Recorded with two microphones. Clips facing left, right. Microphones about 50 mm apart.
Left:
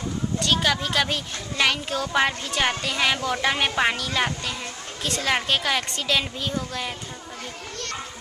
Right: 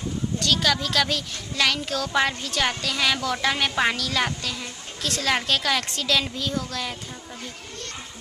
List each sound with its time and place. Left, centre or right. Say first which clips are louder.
0.5 s a child's voice: even; centre